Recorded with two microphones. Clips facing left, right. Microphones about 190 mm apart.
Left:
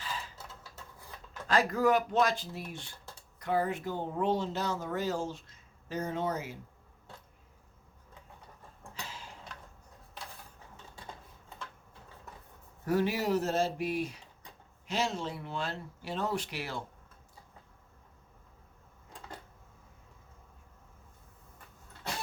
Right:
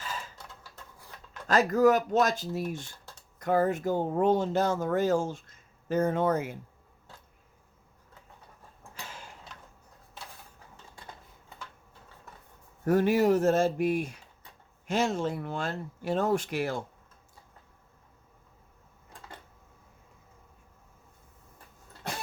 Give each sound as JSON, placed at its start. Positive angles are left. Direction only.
{"t": 1.5, "sound": "speech", "side_deg": -45}
{"t": 12.8, "sound": "speech", "side_deg": -50}